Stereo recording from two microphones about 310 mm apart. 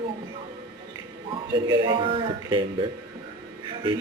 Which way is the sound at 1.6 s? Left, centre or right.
Centre.